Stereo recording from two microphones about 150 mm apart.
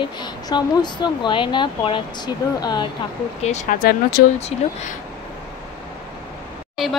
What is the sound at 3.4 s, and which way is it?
Speech, 50° left (ahead or behind).